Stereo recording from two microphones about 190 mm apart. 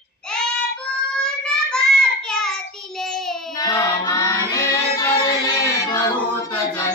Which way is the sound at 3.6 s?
20° left (ahead or behind).